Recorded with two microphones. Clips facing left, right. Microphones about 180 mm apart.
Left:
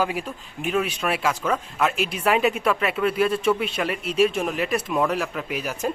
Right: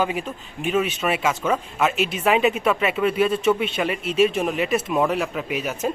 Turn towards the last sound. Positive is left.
turn(degrees=0)  # may be behind; listen again after turning